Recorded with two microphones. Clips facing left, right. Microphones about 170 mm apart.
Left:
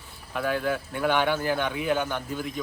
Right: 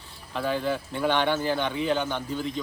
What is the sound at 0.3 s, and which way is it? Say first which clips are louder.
Speech: even; 10° left (ahead or behind).